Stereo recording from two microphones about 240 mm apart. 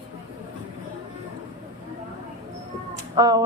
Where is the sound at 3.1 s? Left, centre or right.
Centre.